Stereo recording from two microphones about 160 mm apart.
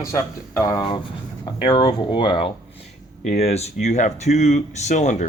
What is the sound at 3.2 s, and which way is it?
Speech, 40° left (ahead or behind).